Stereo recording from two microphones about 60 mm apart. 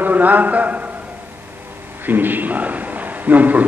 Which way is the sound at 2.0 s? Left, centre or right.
Right.